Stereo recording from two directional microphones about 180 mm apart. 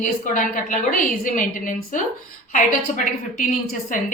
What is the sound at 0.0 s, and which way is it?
A woman's voice, 45° left (ahead or behind).